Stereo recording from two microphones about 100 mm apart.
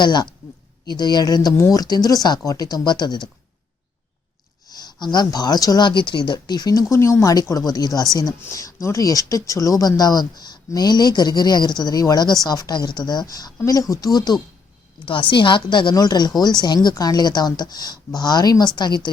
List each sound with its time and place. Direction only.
0.0 s a woman's voice: 45° left (ahead or behind)
4.7 s a woman's voice: 45° left (ahead or behind)
6.9 s speech: 25° left (ahead or behind)
15.0 s a woman's voice: 55° left (ahead or behind)